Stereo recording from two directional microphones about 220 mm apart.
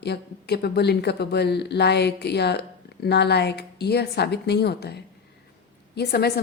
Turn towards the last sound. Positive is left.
turn(degrees=45)  # may be behind; listen again after turning